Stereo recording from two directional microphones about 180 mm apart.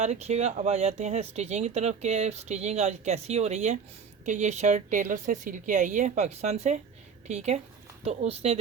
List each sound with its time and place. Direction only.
0.0 s a woman's voice: 40° right (ahead or behind)